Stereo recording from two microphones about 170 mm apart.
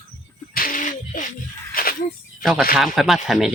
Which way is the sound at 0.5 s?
55° left (ahead or behind).